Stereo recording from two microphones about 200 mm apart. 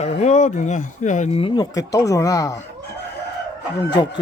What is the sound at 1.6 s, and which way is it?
Speech, 15° left (ahead or behind).